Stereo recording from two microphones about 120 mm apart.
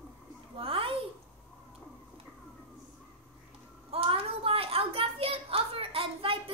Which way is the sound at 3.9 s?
50° right (ahead or behind).